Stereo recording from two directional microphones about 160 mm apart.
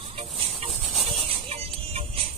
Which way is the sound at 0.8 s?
Centre (ahead or behind).